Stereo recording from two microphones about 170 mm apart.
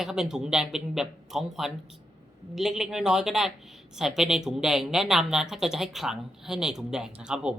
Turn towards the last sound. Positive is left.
turn(degrees=-5)  # may be behind; listen again after turning